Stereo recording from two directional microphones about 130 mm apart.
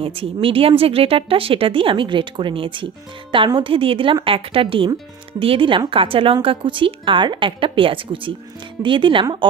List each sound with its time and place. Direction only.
0.0 s a woman's voice: 45° right (ahead or behind)